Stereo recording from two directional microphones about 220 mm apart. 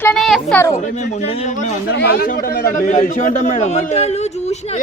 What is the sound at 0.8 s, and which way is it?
A man's voice, 35° left (ahead or behind).